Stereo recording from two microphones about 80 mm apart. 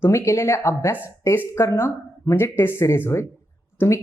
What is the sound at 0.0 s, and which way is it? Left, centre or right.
Speech, left.